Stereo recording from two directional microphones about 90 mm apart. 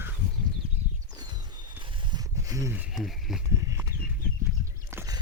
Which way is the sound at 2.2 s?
40° right (ahead or behind).